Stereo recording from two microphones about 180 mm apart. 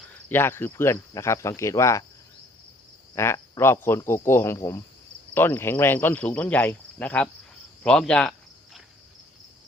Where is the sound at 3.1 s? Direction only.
15° left (ahead or behind).